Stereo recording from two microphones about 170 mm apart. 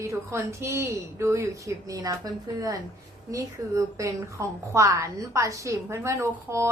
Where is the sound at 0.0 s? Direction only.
15° right (ahead or behind).